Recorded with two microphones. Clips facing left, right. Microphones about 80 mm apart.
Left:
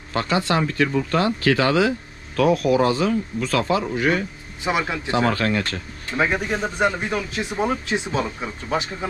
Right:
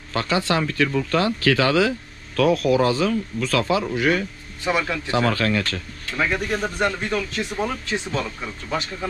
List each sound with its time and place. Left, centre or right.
0.1 s speech: left